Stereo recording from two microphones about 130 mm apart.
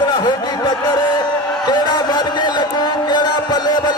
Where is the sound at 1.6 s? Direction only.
35° left (ahead or behind).